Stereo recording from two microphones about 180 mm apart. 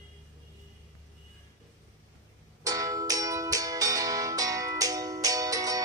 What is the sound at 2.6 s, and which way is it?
Music, 20° right (ahead or behind).